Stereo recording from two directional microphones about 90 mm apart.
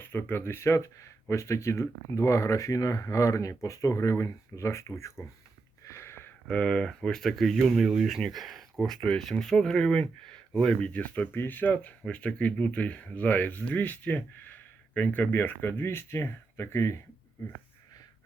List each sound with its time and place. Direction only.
0.0 s speech: 25° left (ahead or behind)
5.8 s a sound: 30° left (ahead or behind)
6.5 s speech: 10° left (ahead or behind); by 17.0 s 30° left (ahead or behind)